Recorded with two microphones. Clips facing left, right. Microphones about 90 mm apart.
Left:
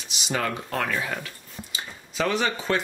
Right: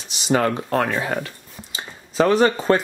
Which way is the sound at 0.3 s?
40° right (ahead or behind).